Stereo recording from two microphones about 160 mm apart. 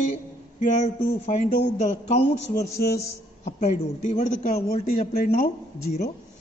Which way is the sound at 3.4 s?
50° left (ahead or behind).